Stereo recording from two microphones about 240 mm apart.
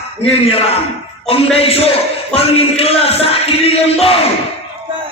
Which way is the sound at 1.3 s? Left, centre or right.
Left.